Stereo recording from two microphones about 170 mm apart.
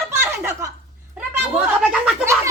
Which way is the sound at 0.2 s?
15° right (ahead or behind).